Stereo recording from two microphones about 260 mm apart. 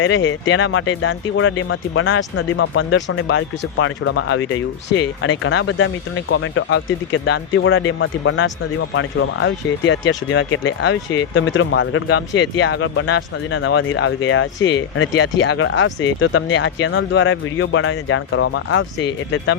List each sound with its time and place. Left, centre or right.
0.0 s speech: left